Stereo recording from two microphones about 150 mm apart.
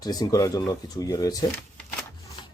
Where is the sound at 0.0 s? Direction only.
25° left (ahead or behind).